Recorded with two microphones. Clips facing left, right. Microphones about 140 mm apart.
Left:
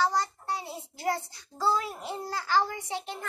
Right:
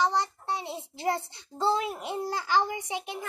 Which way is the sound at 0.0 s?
25° right (ahead or behind).